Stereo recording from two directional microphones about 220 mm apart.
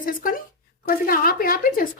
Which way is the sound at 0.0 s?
40° left (ahead or behind).